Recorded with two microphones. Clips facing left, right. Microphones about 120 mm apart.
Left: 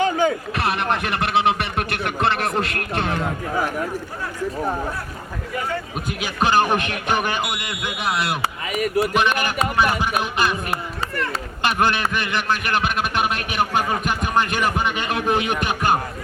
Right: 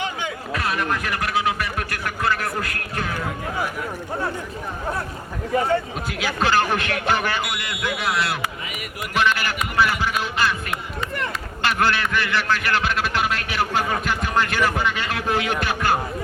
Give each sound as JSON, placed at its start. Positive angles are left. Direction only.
{"t": 0.0, "sound": "a sound", "side_deg": 40}
{"t": 1.0, "sound": "a sound", "side_deg": 25}
{"t": 3.0, "sound": "a man's voice", "side_deg": 25}
{"t": 6.1, "sound": "a man's voice", "side_deg": 20}
{"t": 8.7, "sound": "speech", "side_deg": 35}
{"t": 9.1, "sound": "music", "side_deg": 20}
{"t": 9.7, "sound": "a man's voice", "side_deg": 20}
{"t": 11.6, "sound": "a man's voice", "side_deg": 20}